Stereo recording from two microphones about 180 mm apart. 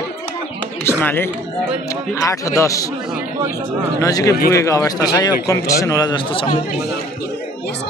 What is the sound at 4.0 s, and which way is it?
A man's voice, 20° left (ahead or behind).